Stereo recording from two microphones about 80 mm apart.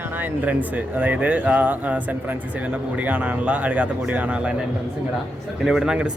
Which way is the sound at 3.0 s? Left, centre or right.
Centre.